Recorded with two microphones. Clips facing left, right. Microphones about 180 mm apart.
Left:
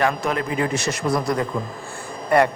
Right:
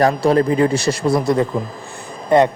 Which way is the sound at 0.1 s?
30° right (ahead or behind).